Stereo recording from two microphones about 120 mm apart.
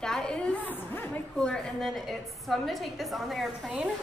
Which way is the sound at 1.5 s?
5° left (ahead or behind).